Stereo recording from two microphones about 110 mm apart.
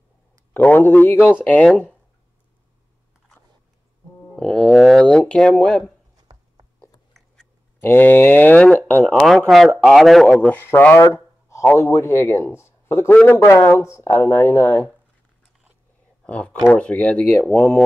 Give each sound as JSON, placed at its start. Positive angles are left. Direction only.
{"t": 0.6, "sound": "speech", "side_deg": 15}
{"t": 4.3, "sound": "a sound", "side_deg": 5}
{"t": 5.3, "sound": "speech", "side_deg": 5}
{"t": 7.2, "sound": "a sound", "side_deg": 5}
{"t": 7.8, "sound": "speech", "side_deg": 20}
{"t": 9.1, "sound": "a man's voice", "side_deg": 0}
{"t": 10.5, "sound": "speech", "side_deg": 20}
{"t": 16.3, "sound": "speech", "side_deg": 10}